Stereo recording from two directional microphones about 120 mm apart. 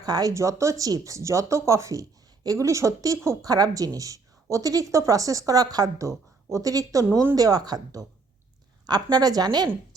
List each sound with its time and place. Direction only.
0.0 s a woman's voice: 35° right (ahead or behind)